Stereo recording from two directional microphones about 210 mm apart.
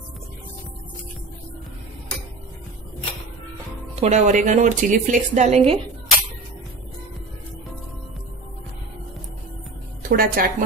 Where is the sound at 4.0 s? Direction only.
35° right (ahead or behind).